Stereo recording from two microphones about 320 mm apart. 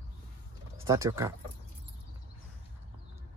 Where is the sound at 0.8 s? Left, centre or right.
Centre.